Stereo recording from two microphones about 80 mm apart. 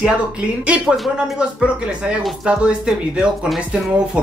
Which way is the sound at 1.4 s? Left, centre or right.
Centre.